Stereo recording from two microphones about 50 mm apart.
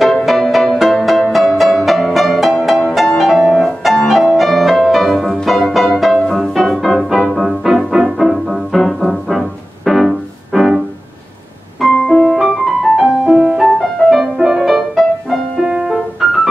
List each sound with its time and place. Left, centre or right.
0.0 s music: centre
11.9 s piano: centre
12.2 s music: centre
12.9 s music: centre
14.3 s music: centre
15.6 s music: centre